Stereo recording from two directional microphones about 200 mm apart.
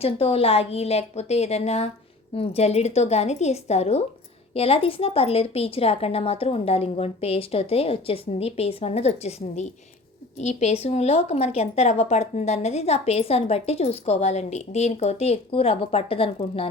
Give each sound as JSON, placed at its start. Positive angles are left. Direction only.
{"t": 0.0, "sound": "a woman's voice", "side_deg": 30}